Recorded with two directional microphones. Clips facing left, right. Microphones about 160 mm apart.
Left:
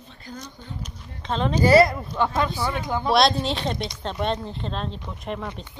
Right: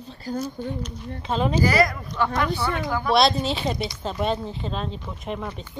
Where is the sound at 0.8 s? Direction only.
5° right (ahead or behind).